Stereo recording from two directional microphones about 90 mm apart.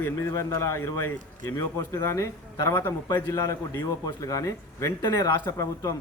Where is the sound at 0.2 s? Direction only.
35° left (ahead or behind).